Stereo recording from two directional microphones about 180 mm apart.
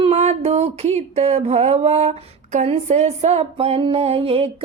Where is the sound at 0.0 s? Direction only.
35° right (ahead or behind).